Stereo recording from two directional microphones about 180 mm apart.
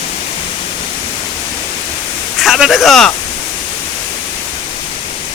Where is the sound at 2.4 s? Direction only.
Centre (ahead or behind).